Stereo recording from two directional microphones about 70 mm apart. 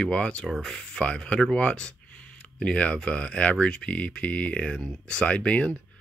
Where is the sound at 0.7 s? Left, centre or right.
Centre.